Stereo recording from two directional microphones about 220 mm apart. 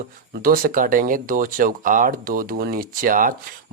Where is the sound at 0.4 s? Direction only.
40° right (ahead or behind).